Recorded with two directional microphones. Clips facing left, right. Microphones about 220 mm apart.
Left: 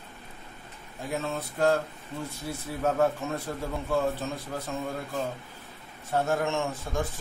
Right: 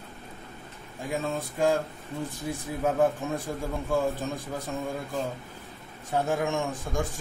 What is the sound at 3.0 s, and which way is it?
A man's voice, 15° right (ahead or behind).